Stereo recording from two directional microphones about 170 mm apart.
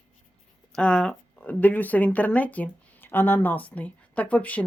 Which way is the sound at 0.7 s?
5° left (ahead or behind).